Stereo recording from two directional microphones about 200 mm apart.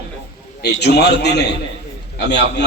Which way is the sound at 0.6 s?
55° left (ahead or behind).